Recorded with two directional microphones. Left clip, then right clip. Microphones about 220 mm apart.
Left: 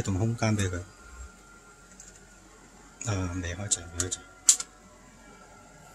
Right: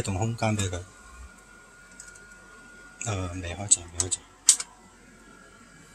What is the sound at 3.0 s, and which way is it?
Speech, 15° left (ahead or behind).